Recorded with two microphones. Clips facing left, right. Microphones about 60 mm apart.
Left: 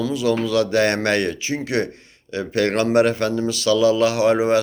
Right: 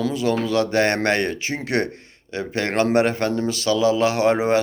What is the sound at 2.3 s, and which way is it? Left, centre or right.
Speech, right.